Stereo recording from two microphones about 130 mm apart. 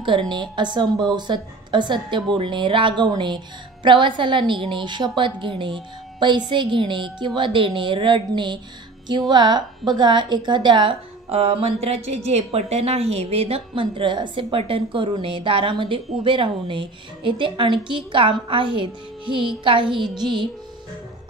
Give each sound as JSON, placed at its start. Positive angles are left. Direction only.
{"t": 0.0, "sound": "a woman's voice", "side_deg": -40}